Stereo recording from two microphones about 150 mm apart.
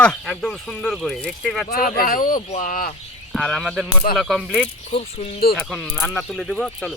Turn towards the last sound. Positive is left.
turn(degrees=5)  # may be behind; listen again after turning